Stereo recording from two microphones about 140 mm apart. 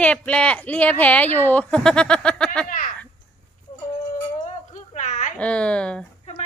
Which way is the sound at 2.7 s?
90° left.